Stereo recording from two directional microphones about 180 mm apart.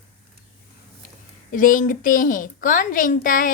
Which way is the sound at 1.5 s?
45° left (ahead or behind).